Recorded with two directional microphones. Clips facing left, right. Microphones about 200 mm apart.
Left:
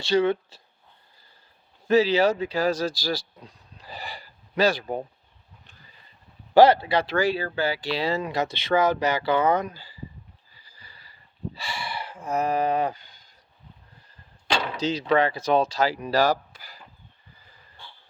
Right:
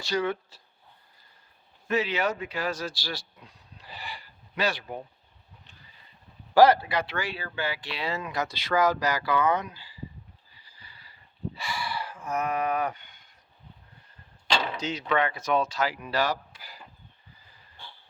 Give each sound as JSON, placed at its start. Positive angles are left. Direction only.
{"t": 0.0, "sound": "speech", "side_deg": 25}
{"t": 1.9, "sound": "speech", "side_deg": 35}
{"t": 6.5, "sound": "speech", "side_deg": 25}
{"t": 11.5, "sound": "speech", "side_deg": 30}
{"t": 14.8, "sound": "speech", "side_deg": 35}